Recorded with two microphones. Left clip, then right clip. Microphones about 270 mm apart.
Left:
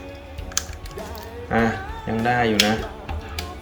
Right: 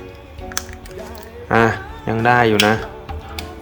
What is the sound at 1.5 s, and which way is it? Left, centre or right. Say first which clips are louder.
Speech: right 6 dB; centre.